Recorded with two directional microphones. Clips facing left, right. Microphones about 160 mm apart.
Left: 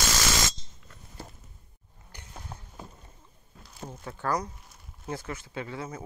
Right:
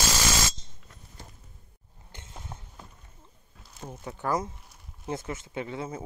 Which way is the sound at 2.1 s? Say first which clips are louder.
Even; 25° right (ahead or behind).